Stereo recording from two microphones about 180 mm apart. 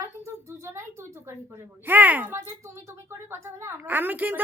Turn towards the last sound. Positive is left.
turn(degrees=-10)  # may be behind; listen again after turning